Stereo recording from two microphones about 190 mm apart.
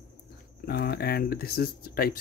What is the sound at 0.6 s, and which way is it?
Speech, 55° left (ahead or behind).